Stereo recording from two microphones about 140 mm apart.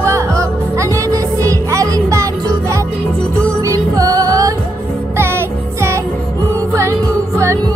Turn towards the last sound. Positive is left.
turn(degrees=-20)  # may be behind; listen again after turning